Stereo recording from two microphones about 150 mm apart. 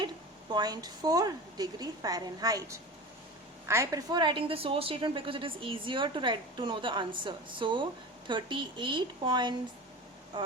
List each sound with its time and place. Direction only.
0.5 s a woman's voice: 25° right (ahead or behind)